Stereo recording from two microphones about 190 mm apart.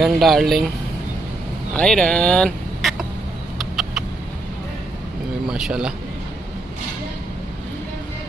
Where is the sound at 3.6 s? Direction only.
Centre (ahead or behind).